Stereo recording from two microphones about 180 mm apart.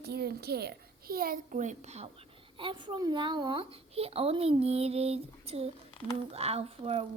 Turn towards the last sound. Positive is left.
turn(degrees=-35)  # may be behind; listen again after turning